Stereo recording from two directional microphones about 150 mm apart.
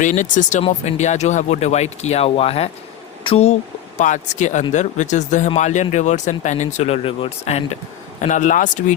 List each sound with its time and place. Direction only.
0.0 s speech: 55° left (ahead or behind)
8.2 s speech: 55° left (ahead or behind)